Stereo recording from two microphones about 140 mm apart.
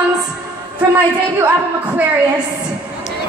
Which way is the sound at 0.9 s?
15° right (ahead or behind).